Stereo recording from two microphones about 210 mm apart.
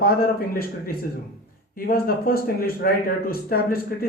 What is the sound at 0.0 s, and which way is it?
Speech, 45° left (ahead or behind).